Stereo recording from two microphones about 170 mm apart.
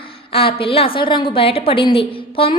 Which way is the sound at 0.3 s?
35° left (ahead or behind).